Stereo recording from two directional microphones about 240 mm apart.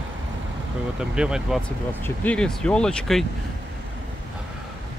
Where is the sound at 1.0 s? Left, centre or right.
Centre.